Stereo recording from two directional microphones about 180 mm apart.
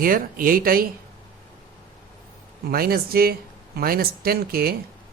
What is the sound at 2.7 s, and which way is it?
Speech, 55° right (ahead or behind).